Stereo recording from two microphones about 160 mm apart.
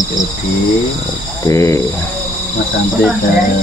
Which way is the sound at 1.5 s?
15° left (ahead or behind).